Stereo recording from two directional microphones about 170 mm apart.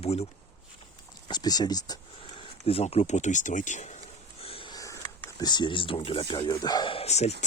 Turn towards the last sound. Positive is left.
turn(degrees=40)  # may be behind; listen again after turning